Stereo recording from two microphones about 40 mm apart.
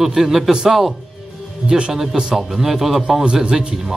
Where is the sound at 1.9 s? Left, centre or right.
Centre.